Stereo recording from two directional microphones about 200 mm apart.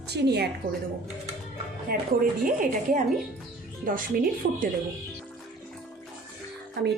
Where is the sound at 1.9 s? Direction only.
45° right (ahead or behind).